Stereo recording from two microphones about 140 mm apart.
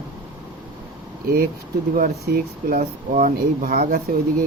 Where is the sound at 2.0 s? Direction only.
90° right.